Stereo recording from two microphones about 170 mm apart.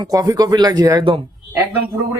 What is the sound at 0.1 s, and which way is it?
Speech, 20° right (ahead or behind).